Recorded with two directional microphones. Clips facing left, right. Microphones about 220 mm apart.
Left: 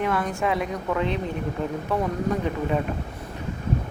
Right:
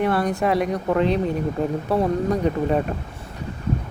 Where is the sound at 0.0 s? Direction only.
35° right (ahead or behind).